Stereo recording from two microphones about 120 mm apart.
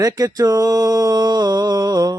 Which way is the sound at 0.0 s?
30° right (ahead or behind).